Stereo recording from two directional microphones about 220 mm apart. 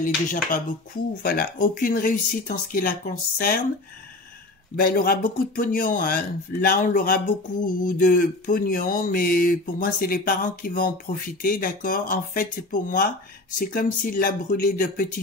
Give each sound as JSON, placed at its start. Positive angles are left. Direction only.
{"t": 0.0, "sound": "speech", "side_deg": 40}
{"t": 4.7, "sound": "speech", "side_deg": 40}